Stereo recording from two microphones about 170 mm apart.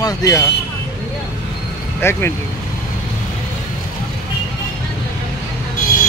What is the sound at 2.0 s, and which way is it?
Speech, 15° left (ahead or behind).